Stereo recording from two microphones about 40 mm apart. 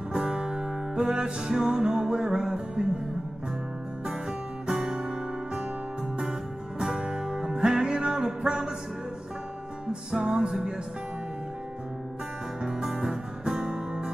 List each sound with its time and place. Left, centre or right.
0.1 s music: right
4.0 s music: centre
6.8 s music: centre
10.1 s music: centre
12.6 s music: centre